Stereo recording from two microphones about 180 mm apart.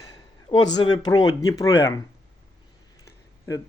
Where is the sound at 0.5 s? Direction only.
25° left (ahead or behind).